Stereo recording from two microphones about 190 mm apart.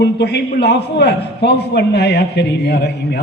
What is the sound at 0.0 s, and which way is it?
A man's voice, 65° left (ahead or behind).